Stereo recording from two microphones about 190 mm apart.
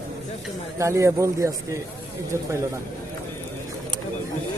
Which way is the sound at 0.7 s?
15° right (ahead or behind).